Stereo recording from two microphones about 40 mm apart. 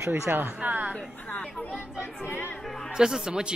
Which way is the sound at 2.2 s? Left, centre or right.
Left.